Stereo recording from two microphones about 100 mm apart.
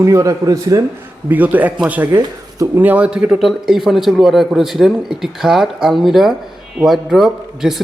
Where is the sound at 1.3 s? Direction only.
15° right (ahead or behind).